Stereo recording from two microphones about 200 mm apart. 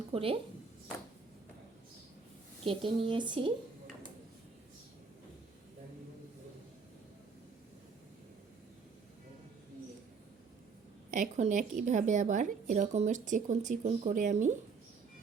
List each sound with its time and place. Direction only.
0.1 s speech: 30° right (ahead or behind)
2.6 s speech: 25° right (ahead or behind)
11.1 s a woman's voice: 35° right (ahead or behind)